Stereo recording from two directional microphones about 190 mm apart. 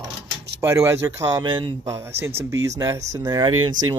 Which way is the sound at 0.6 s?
15° right (ahead or behind).